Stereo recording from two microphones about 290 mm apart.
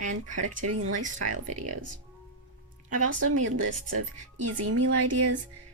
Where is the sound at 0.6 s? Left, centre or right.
Right.